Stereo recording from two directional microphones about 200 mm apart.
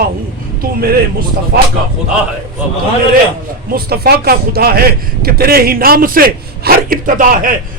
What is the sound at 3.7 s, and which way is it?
Speech, 50° right (ahead or behind).